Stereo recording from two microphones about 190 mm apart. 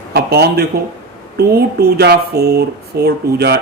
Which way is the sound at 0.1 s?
55° right (ahead or behind).